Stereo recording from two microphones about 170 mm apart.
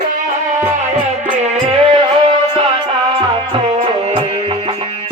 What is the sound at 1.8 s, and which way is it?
Music, 30° right (ahead or behind).